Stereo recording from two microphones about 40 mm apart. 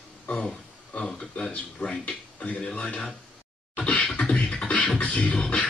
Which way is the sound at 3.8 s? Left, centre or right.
Left.